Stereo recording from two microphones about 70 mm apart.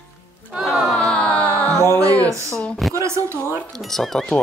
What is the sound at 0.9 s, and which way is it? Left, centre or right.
Music, centre.